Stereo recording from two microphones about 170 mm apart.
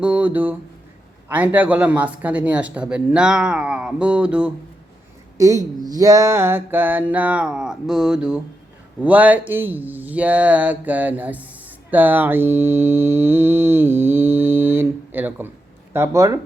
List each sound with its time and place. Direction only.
0.0 s speech: 5° right (ahead or behind)
5.4 s speech: 20° right (ahead or behind)
11.9 s mantra: 10° right (ahead or behind)
15.9 s speech: 15° right (ahead or behind)